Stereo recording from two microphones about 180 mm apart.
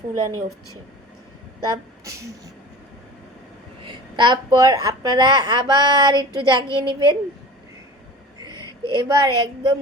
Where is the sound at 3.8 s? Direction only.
25° right (ahead or behind).